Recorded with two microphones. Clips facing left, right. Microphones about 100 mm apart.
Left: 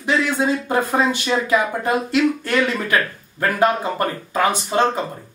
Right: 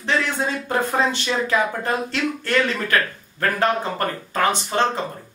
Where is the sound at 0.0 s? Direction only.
15° left (ahead or behind).